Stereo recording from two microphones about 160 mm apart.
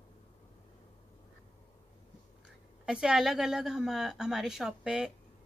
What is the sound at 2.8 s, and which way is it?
A woman's voice, 5° right (ahead or behind).